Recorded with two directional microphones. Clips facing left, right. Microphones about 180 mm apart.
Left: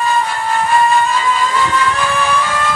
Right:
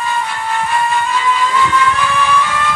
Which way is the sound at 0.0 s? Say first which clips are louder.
Left 3 dB; 40° left (ahead or behind).